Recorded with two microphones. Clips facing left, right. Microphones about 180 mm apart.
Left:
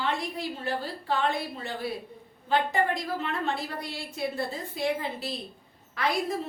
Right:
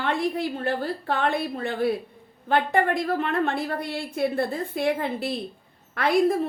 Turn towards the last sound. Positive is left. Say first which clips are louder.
# right 8 dB
turn(degrees=-55)  # may be behind; listen again after turning